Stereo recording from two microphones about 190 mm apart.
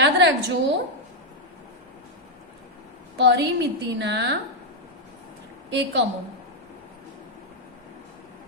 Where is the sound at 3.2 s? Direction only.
65° right (ahead or behind).